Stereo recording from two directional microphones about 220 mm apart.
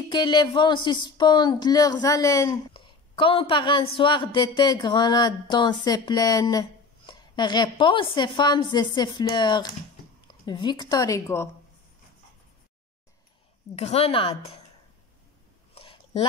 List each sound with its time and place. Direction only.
0.1 s speech: 20° left (ahead or behind)
13.7 s speech: 30° left (ahead or behind)
15.7 s a sound: 25° left (ahead or behind)